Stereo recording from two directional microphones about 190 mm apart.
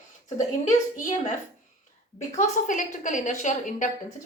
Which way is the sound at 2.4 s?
45° left (ahead or behind).